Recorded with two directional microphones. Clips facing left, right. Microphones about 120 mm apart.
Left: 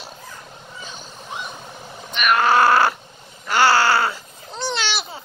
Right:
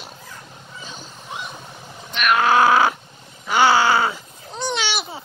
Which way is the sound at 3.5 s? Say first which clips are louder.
Right 1 dB; centre (ahead or behind).